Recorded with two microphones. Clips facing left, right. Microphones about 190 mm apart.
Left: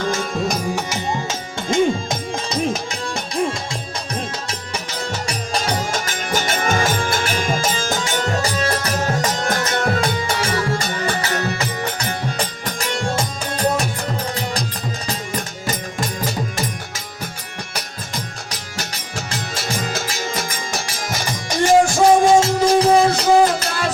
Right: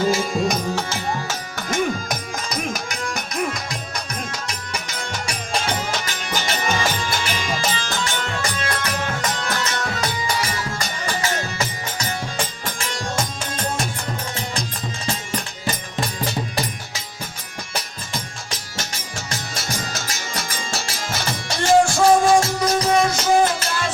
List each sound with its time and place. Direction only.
0.0 s music: 5° right (ahead or behind)
0.8 s music: 20° left (ahead or behind); by 10.0 s 50° left (ahead or behind)
11.0 s music: 60° left (ahead or behind)
15.0 s music: 40° left (ahead or behind)
20.7 s music: 15° left (ahead or behind); by 23.6 s 35° left (ahead or behind)